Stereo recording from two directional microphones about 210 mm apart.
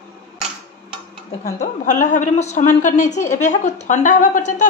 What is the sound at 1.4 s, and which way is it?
A woman's voice, 35° left (ahead or behind).